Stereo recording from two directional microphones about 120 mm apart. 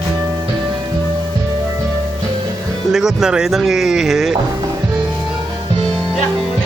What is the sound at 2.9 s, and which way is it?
Speech, 5° right (ahead or behind).